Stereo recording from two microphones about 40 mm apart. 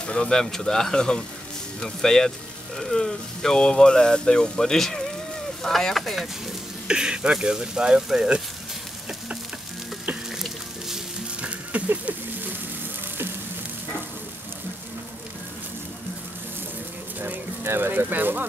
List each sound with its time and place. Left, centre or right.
0.0 s speech: left
0.3 s speech: centre
5.9 s speech: centre
6.9 s speech: right
11.7 s a sound: right
17.6 s speech: right